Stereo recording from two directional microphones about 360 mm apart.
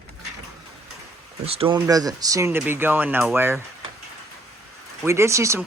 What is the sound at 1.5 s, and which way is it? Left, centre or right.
Speech, centre.